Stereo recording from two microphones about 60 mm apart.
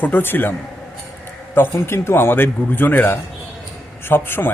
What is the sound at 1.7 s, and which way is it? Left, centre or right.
Speech, left.